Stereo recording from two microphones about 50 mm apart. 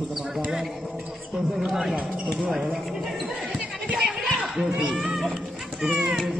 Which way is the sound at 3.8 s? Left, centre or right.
Right.